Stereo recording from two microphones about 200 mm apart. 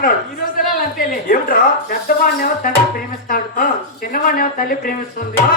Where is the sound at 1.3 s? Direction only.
45° left (ahead or behind).